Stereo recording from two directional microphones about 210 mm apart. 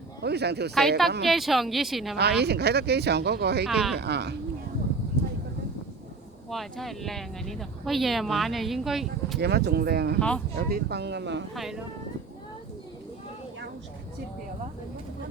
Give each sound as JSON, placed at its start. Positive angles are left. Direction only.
{"t": 0.2, "sound": "speech", "side_deg": -50}
{"t": 0.7, "sound": "speech", "side_deg": 0}
{"t": 2.1, "sound": "speech", "side_deg": -50}
{"t": 3.7, "sound": "speech", "side_deg": 0}
{"t": 3.9, "sound": "speech", "side_deg": -50}
{"t": 6.5, "sound": "speech", "side_deg": 0}
{"t": 9.4, "sound": "speech", "side_deg": -50}
{"t": 10.2, "sound": "speech", "side_deg": 5}
{"t": 10.6, "sound": "speech", "side_deg": -45}
{"t": 11.5, "sound": "speech", "side_deg": 0}